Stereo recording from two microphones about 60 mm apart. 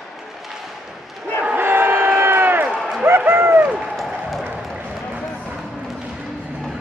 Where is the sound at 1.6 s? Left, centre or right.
Right.